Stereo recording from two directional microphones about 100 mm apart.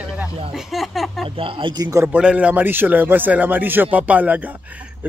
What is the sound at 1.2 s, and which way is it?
Speech, 60° right (ahead or behind).